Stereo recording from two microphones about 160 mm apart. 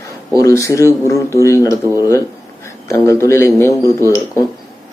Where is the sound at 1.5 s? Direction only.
20° right (ahead or behind).